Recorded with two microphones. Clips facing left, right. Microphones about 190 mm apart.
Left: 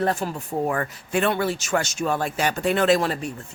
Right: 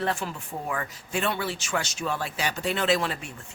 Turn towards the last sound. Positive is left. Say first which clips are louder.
# left 6 dB
turn(degrees=40)  # may be behind; listen again after turning